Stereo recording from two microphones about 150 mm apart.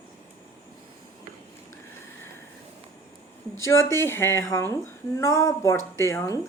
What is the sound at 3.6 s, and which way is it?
Speech, 20° left (ahead or behind).